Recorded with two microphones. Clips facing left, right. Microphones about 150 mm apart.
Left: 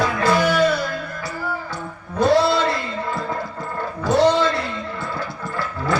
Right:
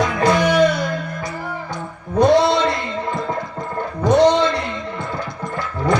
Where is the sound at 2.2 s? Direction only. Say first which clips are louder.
Right 3 dB; 20° right (ahead or behind).